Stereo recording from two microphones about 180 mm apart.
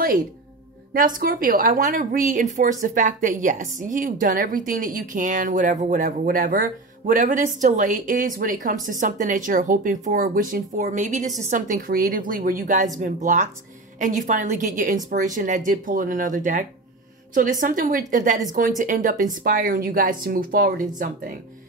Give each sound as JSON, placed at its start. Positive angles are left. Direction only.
{"t": 0.9, "sound": "a woman's voice", "side_deg": -50}